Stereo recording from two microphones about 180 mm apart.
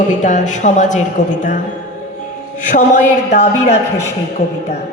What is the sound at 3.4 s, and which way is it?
Speech, 40° left (ahead or behind).